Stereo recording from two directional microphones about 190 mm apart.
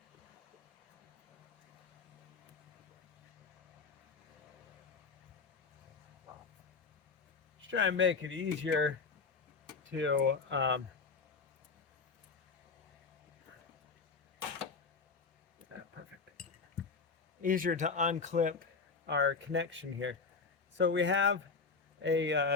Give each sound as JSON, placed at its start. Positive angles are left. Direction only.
{"t": 7.7, "sound": "speech", "side_deg": -75}
{"t": 10.0, "sound": "speech", "side_deg": -75}
{"t": 17.4, "sound": "speech", "side_deg": -45}
{"t": 19.0, "sound": "speech", "side_deg": -70}